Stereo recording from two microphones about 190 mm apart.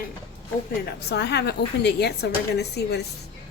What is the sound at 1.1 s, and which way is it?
A woman's voice, 60° left (ahead or behind).